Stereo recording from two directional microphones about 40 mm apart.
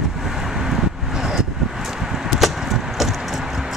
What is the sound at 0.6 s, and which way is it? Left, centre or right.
Vehicle, centre.